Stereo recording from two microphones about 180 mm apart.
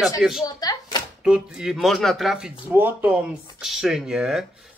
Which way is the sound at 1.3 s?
5° right (ahead or behind).